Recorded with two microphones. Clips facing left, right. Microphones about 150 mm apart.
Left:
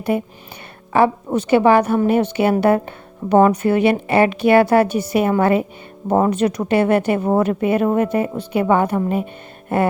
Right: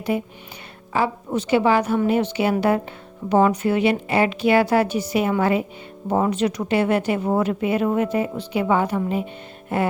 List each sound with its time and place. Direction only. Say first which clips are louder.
0.1 s a woman's voice: left 3 dB; 50° left (ahead or behind)